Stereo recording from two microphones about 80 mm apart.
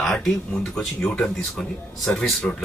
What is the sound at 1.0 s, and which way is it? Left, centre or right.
Speech, centre.